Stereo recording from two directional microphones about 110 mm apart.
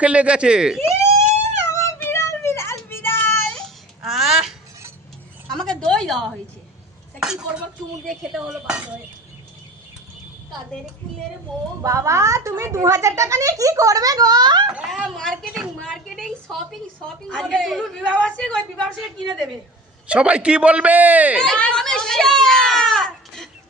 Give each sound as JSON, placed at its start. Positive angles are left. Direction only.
{"t": 0.0, "sound": "a man's voice", "side_deg": -10}
{"t": 0.8, "sound": "police car", "side_deg": 25}
{"t": 2.1, "sound": "child singing", "side_deg": 25}
{"t": 4.0, "sound": "a sound", "side_deg": 0}
{"t": 7.2, "sound": "a man's voice", "side_deg": -5}
{"t": 11.8, "sound": "speech", "side_deg": -30}
{"t": 14.8, "sound": "a woman's voice", "side_deg": -5}
{"t": 15.8, "sound": "a sound", "side_deg": 0}
{"t": 17.2, "sound": "a woman's voice", "side_deg": 5}
{"t": 20.1, "sound": "a man's voice", "side_deg": -10}
{"t": 21.4, "sound": "a sound", "side_deg": 10}